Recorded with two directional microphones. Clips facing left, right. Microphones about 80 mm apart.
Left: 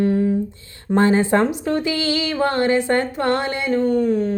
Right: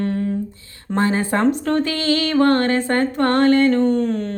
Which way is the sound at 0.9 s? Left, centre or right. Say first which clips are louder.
Left 3 dB; left.